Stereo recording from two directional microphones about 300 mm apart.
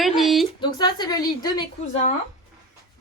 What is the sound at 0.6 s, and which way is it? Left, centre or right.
Speech, centre.